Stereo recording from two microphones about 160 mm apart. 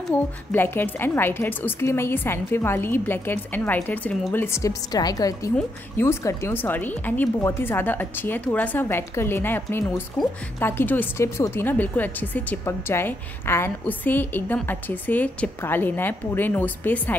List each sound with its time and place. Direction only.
0.1 s a woman's voice: 10° left (ahead or behind)